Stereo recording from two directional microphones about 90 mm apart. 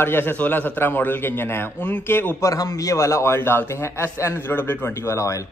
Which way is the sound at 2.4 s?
40° left (ahead or behind).